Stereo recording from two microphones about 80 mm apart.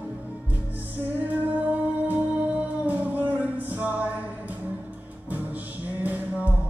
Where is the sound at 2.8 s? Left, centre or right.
Right.